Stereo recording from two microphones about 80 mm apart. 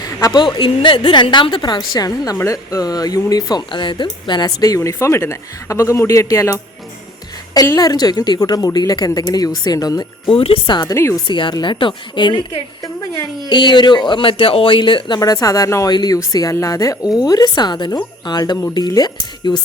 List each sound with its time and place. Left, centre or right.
0.3 s speech: left
1.9 s a woman's voice: left
3.7 s speech: left
4.6 s speech: left
7.5 s a woman's voice: left
10.2 s speech: left
10.9 s speech: left
11.3 s a woman's voice: left
11.5 s speech: left
15.2 s a woman's voice: left
15.9 s a woman's voice: left
16.1 s a woman's voice: left